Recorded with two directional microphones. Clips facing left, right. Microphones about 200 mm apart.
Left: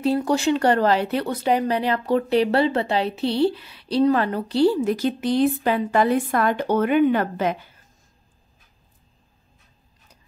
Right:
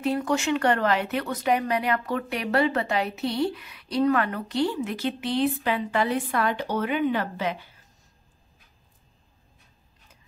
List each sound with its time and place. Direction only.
0.0 s speech: 35° left (ahead or behind); by 7.5 s 50° left (ahead or behind)